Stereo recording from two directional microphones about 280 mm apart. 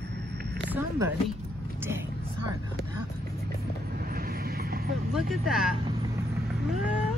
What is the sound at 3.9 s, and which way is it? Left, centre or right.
Vehicle, right.